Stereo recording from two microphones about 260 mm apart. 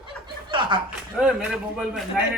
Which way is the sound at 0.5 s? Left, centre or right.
Centre.